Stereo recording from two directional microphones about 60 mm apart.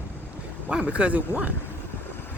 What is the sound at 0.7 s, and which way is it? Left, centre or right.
Speech, right.